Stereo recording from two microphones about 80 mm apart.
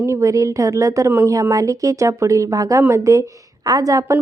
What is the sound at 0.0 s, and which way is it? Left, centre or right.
A woman's voice, right.